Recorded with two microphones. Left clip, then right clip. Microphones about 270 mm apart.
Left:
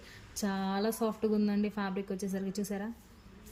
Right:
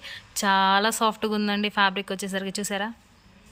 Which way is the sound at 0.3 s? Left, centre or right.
Centre.